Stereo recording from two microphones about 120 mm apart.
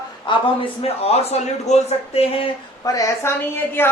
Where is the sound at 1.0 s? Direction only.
60° left (ahead or behind).